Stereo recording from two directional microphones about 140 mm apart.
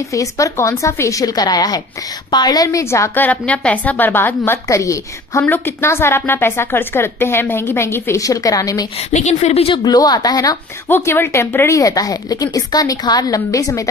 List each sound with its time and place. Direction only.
0.1 s a woman's voice: 25° left (ahead or behind)
8.9 s a woman's voice: 55° left (ahead or behind)
9.8 s speech: 30° left (ahead or behind)